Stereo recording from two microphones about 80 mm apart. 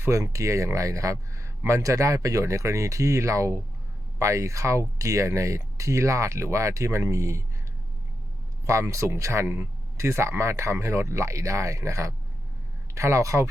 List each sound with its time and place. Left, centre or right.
0.0 s speech: right
8.6 s speech: right